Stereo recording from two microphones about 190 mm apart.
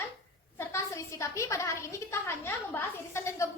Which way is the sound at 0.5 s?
15° left (ahead or behind).